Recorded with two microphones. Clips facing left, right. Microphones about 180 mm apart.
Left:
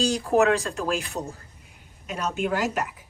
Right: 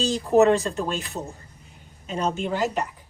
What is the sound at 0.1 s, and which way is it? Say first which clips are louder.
Speech: right 3 dB; centre (ahead or behind).